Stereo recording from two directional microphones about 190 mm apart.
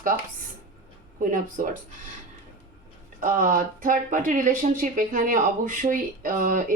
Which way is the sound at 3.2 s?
45° right (ahead or behind).